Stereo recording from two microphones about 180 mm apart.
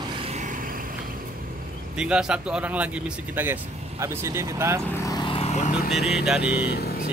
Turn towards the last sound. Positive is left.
turn(degrees=-5)  # may be behind; listen again after turning